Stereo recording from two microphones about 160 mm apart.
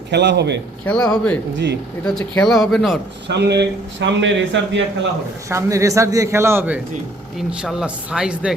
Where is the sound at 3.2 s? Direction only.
90° right.